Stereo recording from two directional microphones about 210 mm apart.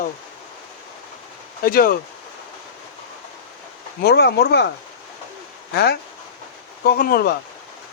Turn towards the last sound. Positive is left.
turn(degrees=45)  # may be behind; listen again after turning